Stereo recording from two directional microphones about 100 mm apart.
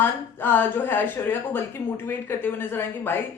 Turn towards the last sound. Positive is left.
turn(degrees=20)  # may be behind; listen again after turning